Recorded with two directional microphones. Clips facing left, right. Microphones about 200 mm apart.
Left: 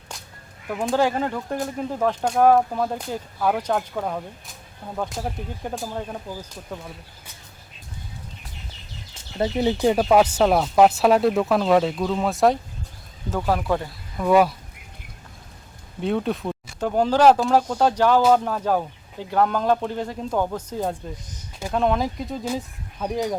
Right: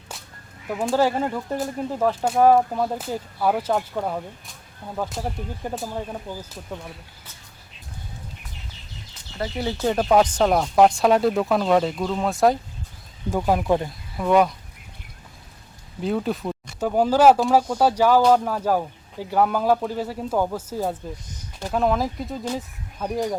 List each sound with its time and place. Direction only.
0.1 s a sound: 5° right (ahead or behind)
0.7 s speech: 5° right (ahead or behind)
9.4 s speech: 20° left (ahead or behind); by 12.5 s centre (ahead or behind)
13.3 s speech: 10° right (ahead or behind)
14.2 s speech: 5° left (ahead or behind)
16.0 s speech: centre (ahead or behind)